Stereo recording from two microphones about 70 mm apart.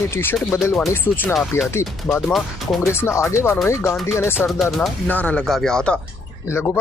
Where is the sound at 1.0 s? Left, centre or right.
Left.